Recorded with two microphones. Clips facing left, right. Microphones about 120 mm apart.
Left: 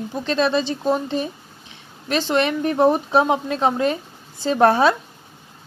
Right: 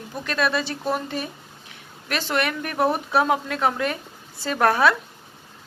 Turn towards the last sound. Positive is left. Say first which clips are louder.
# left 4 dB
turn(degrees=25)  # may be behind; listen again after turning